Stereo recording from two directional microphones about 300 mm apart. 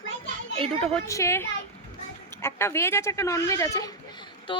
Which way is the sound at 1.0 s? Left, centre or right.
Centre.